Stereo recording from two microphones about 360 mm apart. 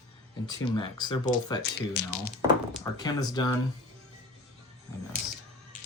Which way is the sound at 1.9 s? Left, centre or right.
Left.